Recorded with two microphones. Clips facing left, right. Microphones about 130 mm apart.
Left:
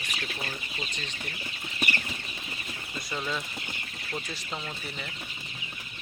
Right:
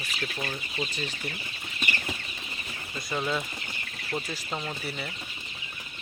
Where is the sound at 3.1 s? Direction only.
15° right (ahead or behind).